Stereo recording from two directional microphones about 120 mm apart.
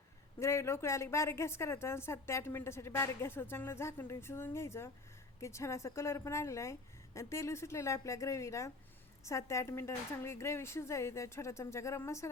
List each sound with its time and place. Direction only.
0.3 s a woman's voice: 20° left (ahead or behind)